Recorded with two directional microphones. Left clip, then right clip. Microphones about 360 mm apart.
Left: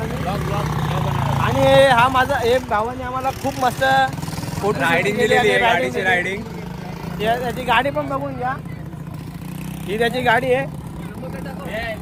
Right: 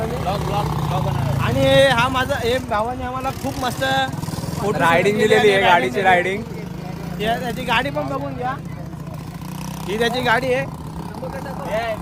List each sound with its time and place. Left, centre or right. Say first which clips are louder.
0.0 s speech: right 2 dB; centre
4.8 s a man's voice: right 3 dB; right
7.2 s speech: left 2 dB; centre
9.9 s speech: left 1 dB; centre